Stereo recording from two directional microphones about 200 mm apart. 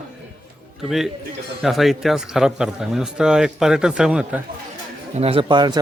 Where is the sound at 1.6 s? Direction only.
Centre (ahead or behind).